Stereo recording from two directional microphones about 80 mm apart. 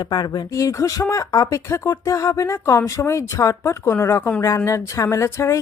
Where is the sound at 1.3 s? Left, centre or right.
Left.